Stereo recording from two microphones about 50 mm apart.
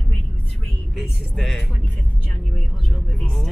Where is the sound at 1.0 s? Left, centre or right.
Centre.